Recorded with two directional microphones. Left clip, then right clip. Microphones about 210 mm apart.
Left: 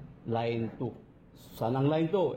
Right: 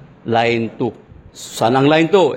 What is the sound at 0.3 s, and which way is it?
Speech, 25° right (ahead or behind).